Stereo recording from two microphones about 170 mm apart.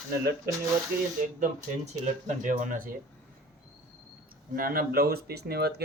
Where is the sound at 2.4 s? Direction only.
50° right (ahead or behind).